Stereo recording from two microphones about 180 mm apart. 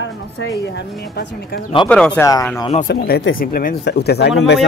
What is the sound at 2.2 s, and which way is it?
Speech, 20° left (ahead or behind).